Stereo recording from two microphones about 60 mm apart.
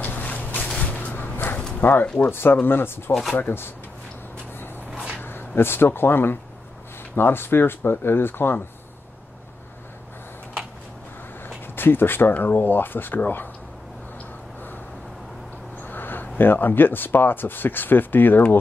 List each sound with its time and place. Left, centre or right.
0.0 s a sound: left
0.7 s a sound: centre
0.9 s dog: left
1.8 s speech: left
5.2 s speech: left
11.4 s speech: left
15.8 s speech: left